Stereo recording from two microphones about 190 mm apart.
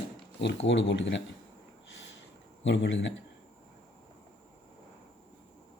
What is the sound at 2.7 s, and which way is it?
Speech, 70° left (ahead or behind).